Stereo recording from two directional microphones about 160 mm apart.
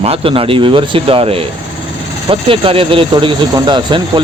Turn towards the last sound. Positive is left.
turn(degrees=-30)  # may be behind; listen again after turning